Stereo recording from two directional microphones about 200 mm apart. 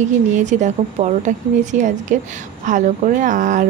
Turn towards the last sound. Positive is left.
turn(degrees=-40)  # may be behind; listen again after turning